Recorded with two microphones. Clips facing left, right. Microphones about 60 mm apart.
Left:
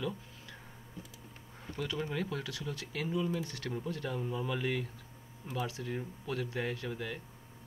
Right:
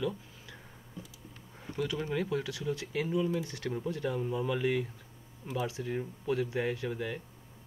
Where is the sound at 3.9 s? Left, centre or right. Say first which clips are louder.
Right 5 dB; centre.